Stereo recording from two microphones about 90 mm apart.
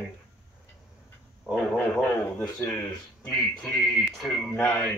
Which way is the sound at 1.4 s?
Centre (ahead or behind).